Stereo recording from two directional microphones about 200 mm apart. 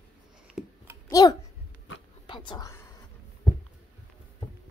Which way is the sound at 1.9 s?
70° left (ahead or behind).